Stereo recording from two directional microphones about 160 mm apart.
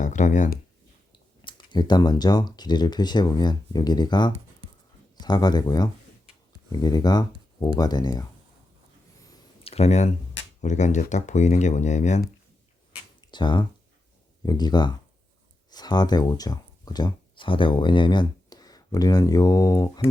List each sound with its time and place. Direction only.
0.0 s speech: 50° left (ahead or behind)
1.4 s speech: 30° left (ahead or behind)
9.6 s speech: 40° left (ahead or behind)
13.2 s speech: 30° left (ahead or behind)